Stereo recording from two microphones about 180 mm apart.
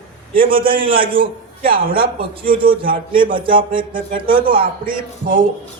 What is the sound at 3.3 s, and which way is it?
Speech, 30° right (ahead or behind).